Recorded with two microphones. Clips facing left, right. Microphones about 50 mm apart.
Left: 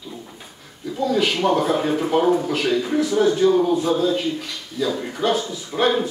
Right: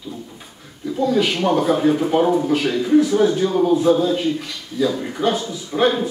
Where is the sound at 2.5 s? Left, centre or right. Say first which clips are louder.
Right 4 dB; centre.